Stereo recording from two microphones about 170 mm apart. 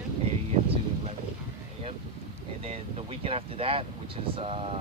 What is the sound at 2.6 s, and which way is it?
Speech, 35° right (ahead or behind).